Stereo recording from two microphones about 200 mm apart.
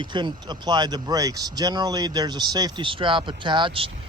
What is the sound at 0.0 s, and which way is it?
Speech, 25° right (ahead or behind).